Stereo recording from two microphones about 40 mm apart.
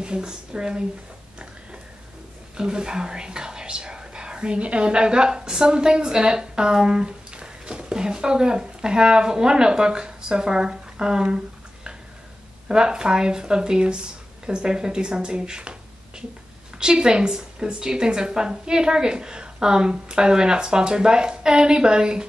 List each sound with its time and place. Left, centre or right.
0.0 s a woman's voice: right
2.5 s a woman's voice: centre
16.7 s a woman's voice: right